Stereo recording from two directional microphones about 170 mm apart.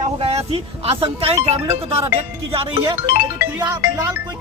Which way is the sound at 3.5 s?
20° right (ahead or behind).